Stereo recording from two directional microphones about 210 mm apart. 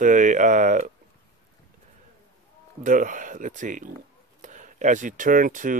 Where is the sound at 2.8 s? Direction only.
40° right (ahead or behind).